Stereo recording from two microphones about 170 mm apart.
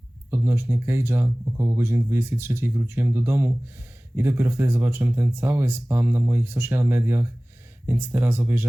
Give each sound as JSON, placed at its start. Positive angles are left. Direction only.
{"t": 0.3, "sound": "speech", "side_deg": -15}